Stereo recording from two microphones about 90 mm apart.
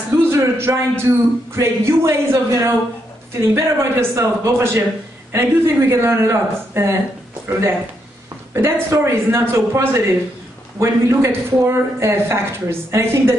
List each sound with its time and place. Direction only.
0.3 s speech: 30° right (ahead or behind)